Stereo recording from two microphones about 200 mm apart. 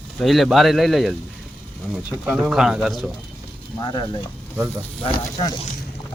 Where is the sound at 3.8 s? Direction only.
25° left (ahead or behind).